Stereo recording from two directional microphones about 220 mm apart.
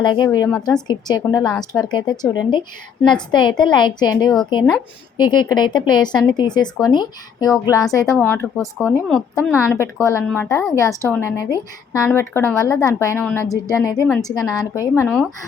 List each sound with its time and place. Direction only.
0.0 s a woman's voice: 20° left (ahead or behind)